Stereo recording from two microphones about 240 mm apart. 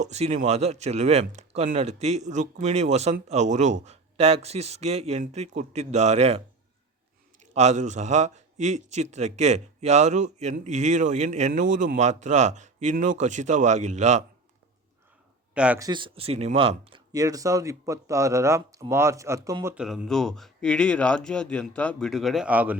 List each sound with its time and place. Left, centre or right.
0.0 s speech: right
7.5 s speech: right
15.5 s speech: centre
15.9 s speech: right